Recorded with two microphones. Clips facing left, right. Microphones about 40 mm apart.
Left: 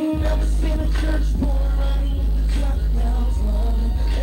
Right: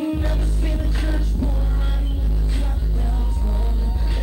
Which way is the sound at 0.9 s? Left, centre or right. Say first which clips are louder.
Left 1 dB; centre.